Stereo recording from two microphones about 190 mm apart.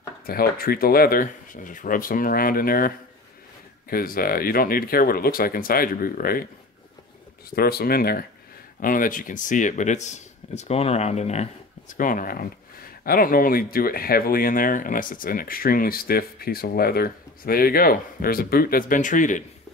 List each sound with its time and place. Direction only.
0.3 s speech: 50° left (ahead or behind)
3.9 s speech: 50° left (ahead or behind)
7.5 s speech: 55° left (ahead or behind); by 11.4 s 35° left (ahead or behind)
11.9 s speech: 45° left (ahead or behind)